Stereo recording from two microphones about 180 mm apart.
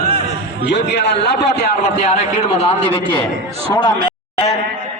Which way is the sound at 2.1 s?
35° left (ahead or behind).